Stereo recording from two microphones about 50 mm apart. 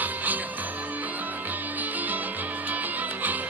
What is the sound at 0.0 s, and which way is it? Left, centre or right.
Music, right.